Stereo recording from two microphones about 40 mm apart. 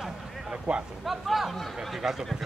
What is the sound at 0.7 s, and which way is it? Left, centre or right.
Speech, right.